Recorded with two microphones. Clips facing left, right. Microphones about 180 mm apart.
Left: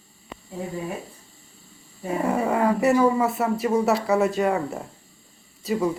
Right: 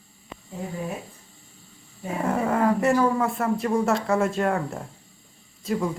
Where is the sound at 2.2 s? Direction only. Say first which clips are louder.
Even; centre (ahead or behind).